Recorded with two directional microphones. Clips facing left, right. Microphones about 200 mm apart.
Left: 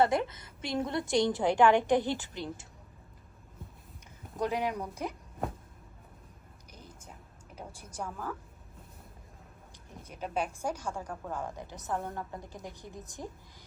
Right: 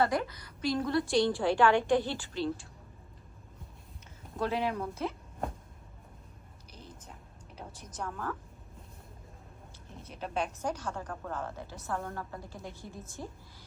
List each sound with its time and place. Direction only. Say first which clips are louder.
0.0 s a woman's voice: left 2 dB; 25° left (ahead or behind)
4.4 s speech: even; 15° left (ahead or behind)
6.7 s a sound: right 1 dB; 10° left (ahead or behind)
10.0 s speech: left 1 dB; 10° left (ahead or behind)